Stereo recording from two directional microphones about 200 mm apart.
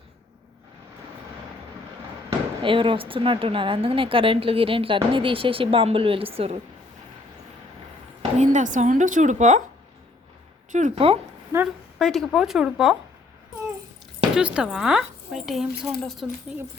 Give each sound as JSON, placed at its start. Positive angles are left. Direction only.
{"t": 2.6, "sound": "a woman's voice", "side_deg": -25}
{"t": 8.4, "sound": "speech", "side_deg": -40}
{"t": 10.7, "sound": "speech", "side_deg": -40}
{"t": 11.5, "sound": "speech", "side_deg": -15}
{"t": 11.9, "sound": "a woman's voice", "side_deg": 0}
{"t": 14.3, "sound": "a woman's voice", "side_deg": -5}